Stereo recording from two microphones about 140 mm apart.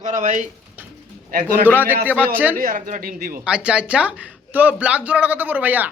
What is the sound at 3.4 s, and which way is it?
Speech, 5° right (ahead or behind).